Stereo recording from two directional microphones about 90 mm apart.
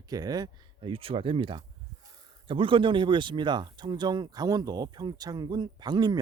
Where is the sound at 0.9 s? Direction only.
90° right.